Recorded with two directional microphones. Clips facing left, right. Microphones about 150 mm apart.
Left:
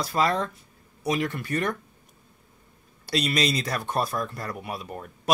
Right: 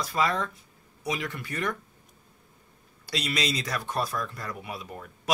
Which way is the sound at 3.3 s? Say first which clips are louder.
Left 3 dB; 55° left (ahead or behind).